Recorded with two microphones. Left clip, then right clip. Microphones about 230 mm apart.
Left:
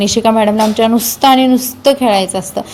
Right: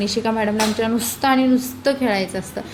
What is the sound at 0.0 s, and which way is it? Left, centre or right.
A woman's voice, left.